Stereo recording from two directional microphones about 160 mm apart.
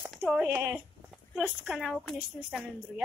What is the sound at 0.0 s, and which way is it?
A woman's voice, centre (ahead or behind).